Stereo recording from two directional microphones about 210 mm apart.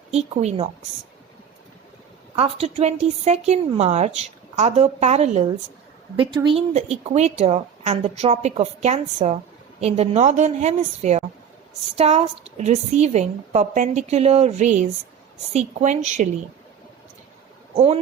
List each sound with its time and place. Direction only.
0.1 s a woman's voice: 30° right (ahead or behind)
2.3 s a woman's voice: 30° right (ahead or behind)
17.7 s a woman's voice: 30° right (ahead or behind)